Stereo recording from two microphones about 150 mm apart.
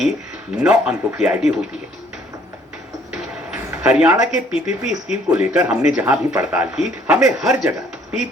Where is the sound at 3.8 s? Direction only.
5° right (ahead or behind).